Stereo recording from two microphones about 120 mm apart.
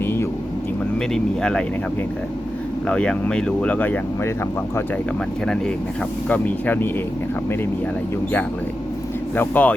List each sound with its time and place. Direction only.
0.0 s vehicle: 20° left (ahead or behind)
1.1 s speech: 5° left (ahead or behind)
2.8 s speech: 5° left (ahead or behind)
6.2 s speech: 15° left (ahead or behind)
9.3 s speech: 15° left (ahead or behind)